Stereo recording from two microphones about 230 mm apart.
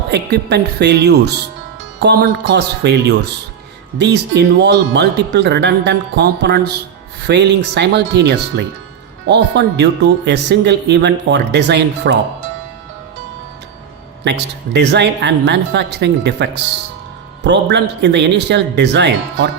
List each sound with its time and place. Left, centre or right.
0.1 s speech: right
14.3 s speech: right